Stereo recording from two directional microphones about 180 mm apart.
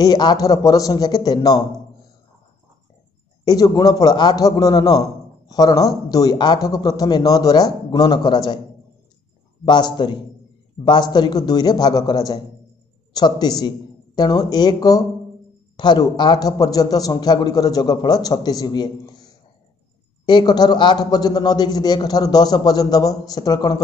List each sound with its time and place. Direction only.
0.0 s a man's voice: 20° left (ahead or behind)
3.4 s a man's voice: 20° left (ahead or behind)
9.7 s a man's voice: 25° left (ahead or behind)